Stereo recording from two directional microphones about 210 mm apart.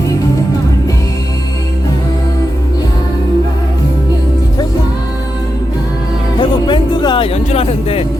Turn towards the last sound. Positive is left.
turn(degrees=25)  # may be behind; listen again after turning